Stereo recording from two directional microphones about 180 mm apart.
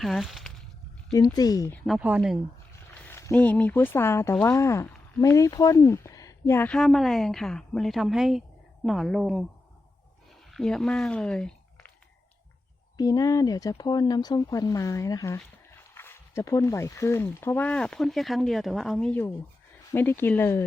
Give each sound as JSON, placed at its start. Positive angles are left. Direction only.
{"t": 0.0, "sound": "speech", "side_deg": 0}
{"t": 1.1, "sound": "speech", "side_deg": 20}
{"t": 1.9, "sound": "speech", "side_deg": -10}
{"t": 3.0, "sound": "speech", "side_deg": 15}
{"t": 10.5, "sound": "speech", "side_deg": 0}
{"t": 13.0, "sound": "speech", "side_deg": 20}